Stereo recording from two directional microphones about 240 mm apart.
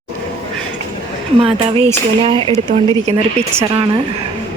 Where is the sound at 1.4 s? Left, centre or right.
Right.